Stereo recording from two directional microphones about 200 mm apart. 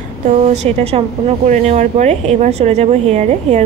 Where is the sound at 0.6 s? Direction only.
30° right (ahead or behind).